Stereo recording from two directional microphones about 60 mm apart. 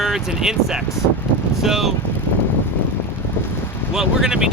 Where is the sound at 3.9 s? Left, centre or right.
Centre.